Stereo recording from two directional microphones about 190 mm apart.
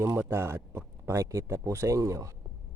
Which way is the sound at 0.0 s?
15° right (ahead or behind).